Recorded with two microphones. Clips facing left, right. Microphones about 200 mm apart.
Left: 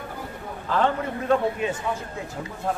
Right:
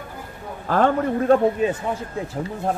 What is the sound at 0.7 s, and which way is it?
Speech, 45° right (ahead or behind).